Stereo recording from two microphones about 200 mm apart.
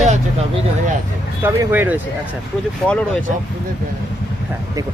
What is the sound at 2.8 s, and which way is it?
Speech, 5° left (ahead or behind).